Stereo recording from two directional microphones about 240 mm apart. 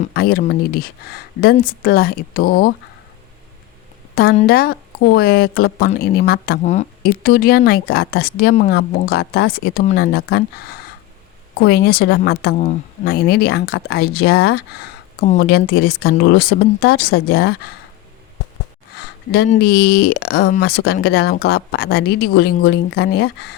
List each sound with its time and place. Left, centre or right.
0.1 s a woman's voice: left
4.1 s a woman's voice: left
18.9 s a sound: left
19.6 s speech: left